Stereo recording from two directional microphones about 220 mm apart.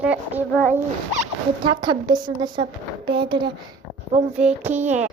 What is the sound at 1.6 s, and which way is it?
A woman's voice, 20° right (ahead or behind).